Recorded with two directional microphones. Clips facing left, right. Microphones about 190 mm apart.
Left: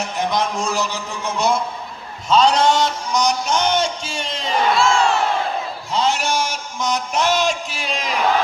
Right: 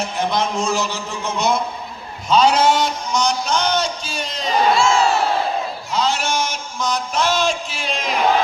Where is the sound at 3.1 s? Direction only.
20° left (ahead or behind).